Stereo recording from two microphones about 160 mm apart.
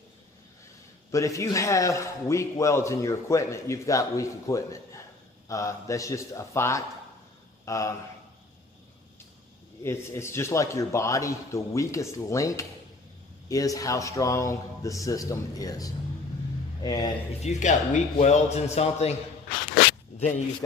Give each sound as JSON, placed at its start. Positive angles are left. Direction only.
{"t": 1.1, "sound": "a man's voice", "side_deg": 20}
{"t": 9.8, "sound": "a man's voice", "side_deg": 15}
{"t": 17.4, "sound": "a man's voice", "side_deg": 45}
{"t": 20.2, "sound": "speech", "side_deg": 40}